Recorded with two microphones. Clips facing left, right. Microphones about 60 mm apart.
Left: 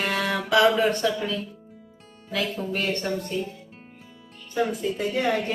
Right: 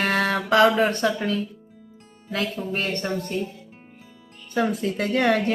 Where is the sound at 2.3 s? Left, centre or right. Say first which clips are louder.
Right 1 dB; right.